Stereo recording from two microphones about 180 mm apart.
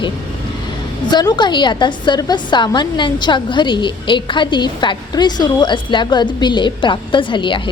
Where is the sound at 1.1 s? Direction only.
25° left (ahead or behind).